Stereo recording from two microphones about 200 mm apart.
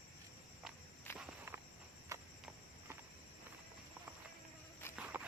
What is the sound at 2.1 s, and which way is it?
Cricket, 15° right (ahead or behind).